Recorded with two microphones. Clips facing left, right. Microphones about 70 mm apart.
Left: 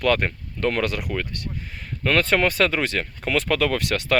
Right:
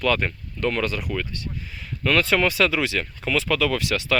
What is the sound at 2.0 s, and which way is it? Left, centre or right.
Speech, left.